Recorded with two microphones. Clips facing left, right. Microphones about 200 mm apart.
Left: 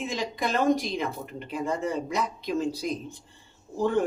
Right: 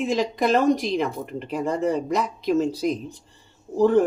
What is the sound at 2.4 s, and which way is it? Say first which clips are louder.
Speech: right 9 dB; 50° right (ahead or behind).